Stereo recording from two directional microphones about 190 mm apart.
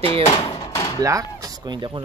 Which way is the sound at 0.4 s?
25° left (ahead or behind).